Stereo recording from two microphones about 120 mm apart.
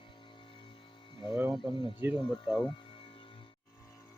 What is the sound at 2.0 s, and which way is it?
Speech, 20° right (ahead or behind).